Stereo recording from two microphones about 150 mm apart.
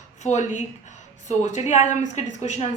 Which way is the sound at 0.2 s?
50° left (ahead or behind).